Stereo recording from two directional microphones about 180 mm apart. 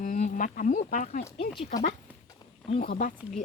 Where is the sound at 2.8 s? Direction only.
45° left (ahead or behind).